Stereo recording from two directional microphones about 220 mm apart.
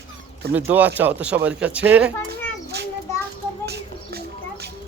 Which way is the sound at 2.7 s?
50° right (ahead or behind).